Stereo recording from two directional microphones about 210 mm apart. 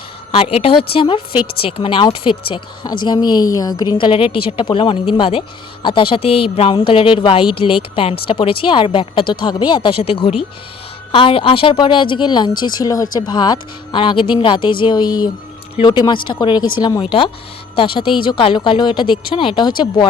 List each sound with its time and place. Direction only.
0.3 s a woman's voice: 25° left (ahead or behind)